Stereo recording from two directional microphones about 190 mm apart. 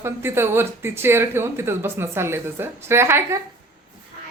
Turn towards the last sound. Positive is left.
turn(degrees=-15)  # may be behind; listen again after turning